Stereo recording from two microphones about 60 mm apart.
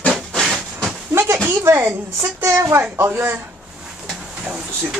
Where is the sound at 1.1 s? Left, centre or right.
Right.